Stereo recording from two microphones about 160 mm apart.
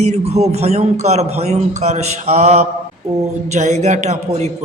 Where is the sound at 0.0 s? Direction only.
40° right (ahead or behind).